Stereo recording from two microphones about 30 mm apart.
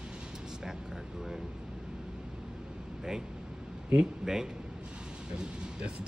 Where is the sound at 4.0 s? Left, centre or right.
Centre.